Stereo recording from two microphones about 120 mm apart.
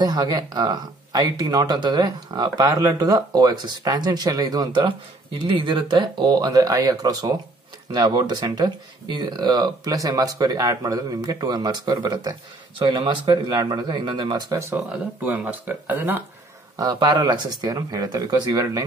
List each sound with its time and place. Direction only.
0.0 s speech: 35° right (ahead or behind)
14.9 s speech: 10° right (ahead or behind)
16.7 s speech: 30° right (ahead or behind)